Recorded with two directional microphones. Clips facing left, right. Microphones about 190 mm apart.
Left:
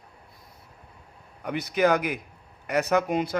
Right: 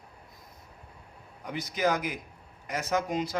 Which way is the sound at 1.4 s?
65° left (ahead or behind).